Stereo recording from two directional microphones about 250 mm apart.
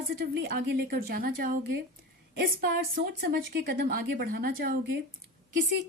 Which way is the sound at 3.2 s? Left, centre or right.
Right.